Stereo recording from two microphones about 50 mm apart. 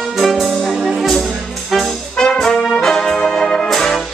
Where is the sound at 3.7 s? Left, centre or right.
Centre.